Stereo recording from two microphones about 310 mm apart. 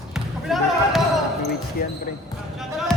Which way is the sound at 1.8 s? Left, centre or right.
Left.